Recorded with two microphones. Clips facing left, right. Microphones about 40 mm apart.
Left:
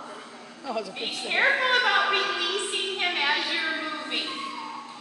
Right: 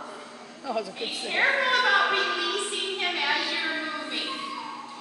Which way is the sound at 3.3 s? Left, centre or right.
Centre.